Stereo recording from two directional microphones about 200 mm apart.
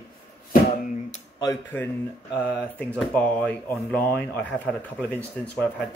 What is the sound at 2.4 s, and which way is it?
Speech, 5° left (ahead or behind).